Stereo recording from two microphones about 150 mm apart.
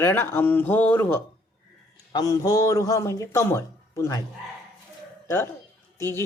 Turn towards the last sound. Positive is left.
turn(degrees=15)  # may be behind; listen again after turning